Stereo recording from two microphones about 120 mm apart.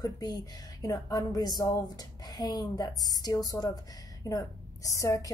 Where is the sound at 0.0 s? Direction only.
30° left (ahead or behind).